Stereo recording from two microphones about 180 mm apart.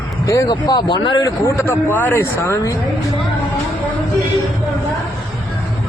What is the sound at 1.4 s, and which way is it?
Speech, 15° left (ahead or behind).